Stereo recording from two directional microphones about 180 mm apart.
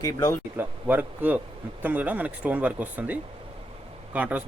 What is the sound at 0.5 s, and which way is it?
Speech, 10° right (ahead or behind).